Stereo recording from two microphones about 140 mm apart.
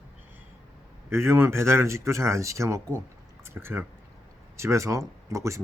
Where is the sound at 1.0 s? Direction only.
20° right (ahead or behind).